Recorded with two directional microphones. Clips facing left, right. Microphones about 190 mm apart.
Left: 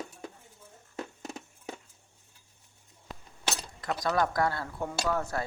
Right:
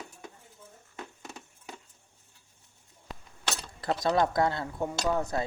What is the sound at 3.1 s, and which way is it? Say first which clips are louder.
Chink: right 1 dB; centre (ahead or behind).